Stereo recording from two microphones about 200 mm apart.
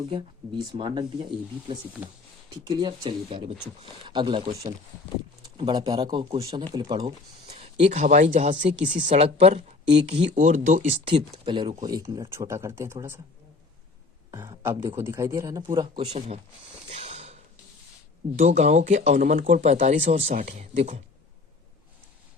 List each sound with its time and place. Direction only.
0.7 s speech: 25° right (ahead or behind)
2.6 s speech: 20° right (ahead or behind)
3.0 s speech: 30° right (ahead or behind); by 13.1 s 15° right (ahead or behind)
14.3 s speech: 20° right (ahead or behind)
16.0 s speech: 30° right (ahead or behind)
16.9 s a sound: 30° right (ahead or behind)
18.3 s speech: 35° right (ahead or behind)